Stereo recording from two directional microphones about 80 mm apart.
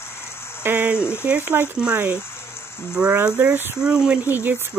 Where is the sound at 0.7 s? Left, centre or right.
Centre.